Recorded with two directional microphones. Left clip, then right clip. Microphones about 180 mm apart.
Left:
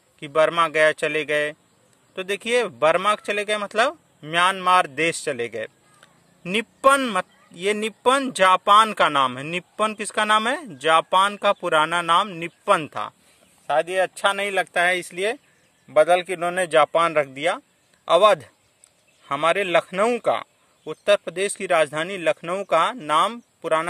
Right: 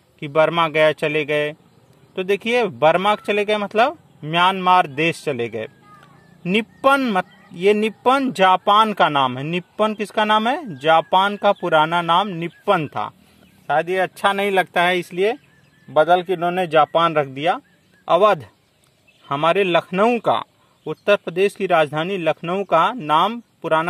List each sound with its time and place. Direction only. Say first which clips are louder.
0.2 s a man's voice: right 2 dB; 15° left (ahead or behind)
15.9 s a man's voice: right 2 dB; 30° left (ahead or behind)